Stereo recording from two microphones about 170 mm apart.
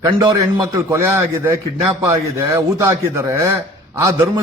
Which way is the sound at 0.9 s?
15° right (ahead or behind).